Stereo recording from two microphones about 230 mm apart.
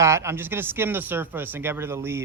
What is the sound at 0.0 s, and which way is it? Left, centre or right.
Speech, centre.